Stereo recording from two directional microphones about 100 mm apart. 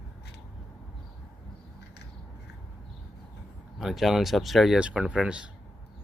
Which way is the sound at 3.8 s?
Centre (ahead or behind).